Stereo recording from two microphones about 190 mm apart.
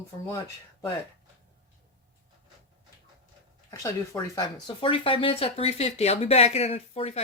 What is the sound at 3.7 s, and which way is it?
Speech, 20° left (ahead or behind).